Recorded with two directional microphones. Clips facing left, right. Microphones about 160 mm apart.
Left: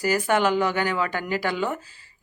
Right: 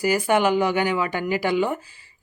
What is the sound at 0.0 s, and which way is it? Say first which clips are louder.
Speech: right 2 dB; 10° right (ahead or behind).